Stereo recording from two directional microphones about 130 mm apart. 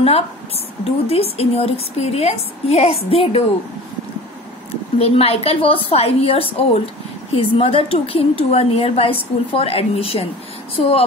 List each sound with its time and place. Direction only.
0.8 s a woman's voice: 50° left (ahead or behind)
4.9 s a woman's voice: 50° left (ahead or behind)